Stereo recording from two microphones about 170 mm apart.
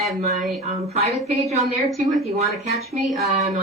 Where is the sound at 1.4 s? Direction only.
Centre (ahead or behind).